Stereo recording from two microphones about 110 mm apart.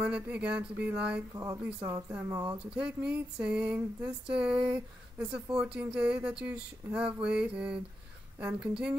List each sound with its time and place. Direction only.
0.0 s speech: 10° right (ahead or behind)
1.3 s speech: 30° right (ahead or behind)
1.6 s speech: 10° right (ahead or behind)
2.2 s speech: 35° right (ahead or behind)
2.6 s speech: 10° right (ahead or behind)